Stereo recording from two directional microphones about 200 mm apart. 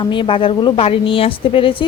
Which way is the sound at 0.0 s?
25° left (ahead or behind).